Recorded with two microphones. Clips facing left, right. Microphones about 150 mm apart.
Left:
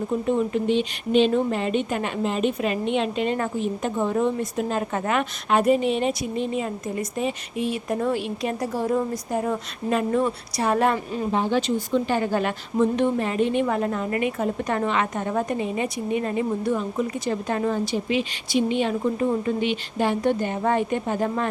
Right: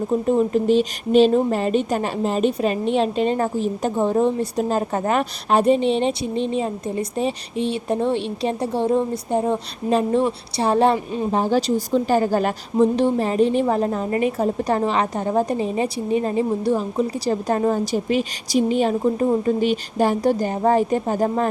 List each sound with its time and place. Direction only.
0.1 s speech: 35° right (ahead or behind); by 11.3 s 20° right (ahead or behind)
11.3 s speech: 40° right (ahead or behind)